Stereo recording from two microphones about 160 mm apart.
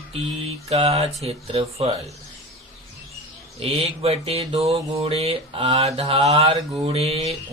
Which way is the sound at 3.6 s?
35° right (ahead or behind).